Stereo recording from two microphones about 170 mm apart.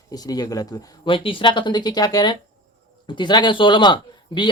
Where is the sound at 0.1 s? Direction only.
20° left (ahead or behind).